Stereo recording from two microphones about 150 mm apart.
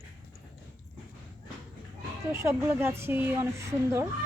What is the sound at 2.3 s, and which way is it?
Speech, 20° right (ahead or behind).